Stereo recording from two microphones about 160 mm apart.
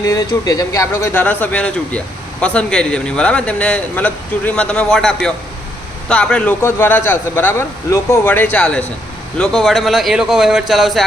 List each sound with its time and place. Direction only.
0.0 s a man's voice: 20° left (ahead or behind); by 11.0 s centre (ahead or behind)